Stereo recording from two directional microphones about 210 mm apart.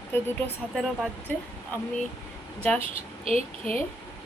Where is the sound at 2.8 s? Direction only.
30° right (ahead or behind).